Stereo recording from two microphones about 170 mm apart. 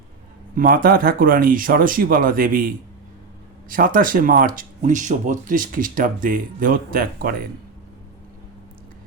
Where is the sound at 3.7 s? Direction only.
55° right (ahead or behind).